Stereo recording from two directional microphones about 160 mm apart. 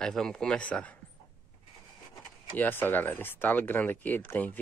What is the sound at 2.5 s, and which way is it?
Speech, 10° left (ahead or behind).